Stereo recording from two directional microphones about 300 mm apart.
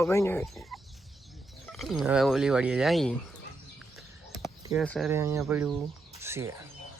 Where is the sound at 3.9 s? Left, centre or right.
Centre.